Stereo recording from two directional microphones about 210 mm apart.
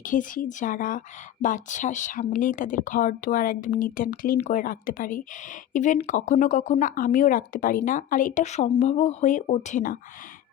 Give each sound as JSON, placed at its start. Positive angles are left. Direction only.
{"t": 0.0, "sound": "speech", "side_deg": 40}